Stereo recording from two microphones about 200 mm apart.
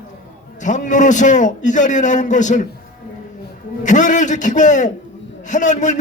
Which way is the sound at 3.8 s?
40° left (ahead or behind).